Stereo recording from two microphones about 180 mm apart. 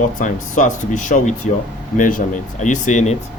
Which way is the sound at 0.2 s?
45° left (ahead or behind).